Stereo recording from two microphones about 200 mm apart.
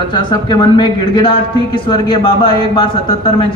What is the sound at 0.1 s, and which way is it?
A woman's voice, 20° left (ahead or behind).